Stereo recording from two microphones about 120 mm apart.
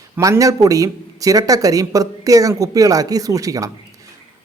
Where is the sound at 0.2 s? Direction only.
30° right (ahead or behind).